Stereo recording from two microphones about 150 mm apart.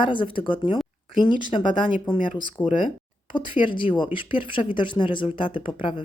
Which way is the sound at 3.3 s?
35° left (ahead or behind).